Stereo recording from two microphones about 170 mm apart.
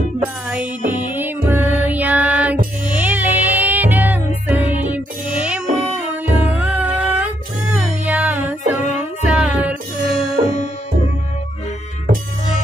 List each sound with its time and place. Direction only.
0.2 s music: 10° right (ahead or behind)
8.7 s music: 45° left (ahead or behind)
9.2 s music: 5° right (ahead or behind)
10.0 s music: 35° left (ahead or behind)